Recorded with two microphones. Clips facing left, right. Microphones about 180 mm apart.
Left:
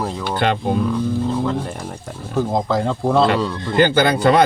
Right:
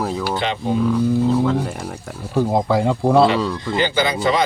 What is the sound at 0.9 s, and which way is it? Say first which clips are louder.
A man's voice: right 3 dB; 10° right (ahead or behind).